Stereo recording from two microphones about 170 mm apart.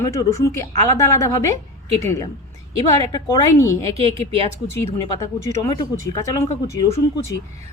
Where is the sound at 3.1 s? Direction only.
20° left (ahead or behind).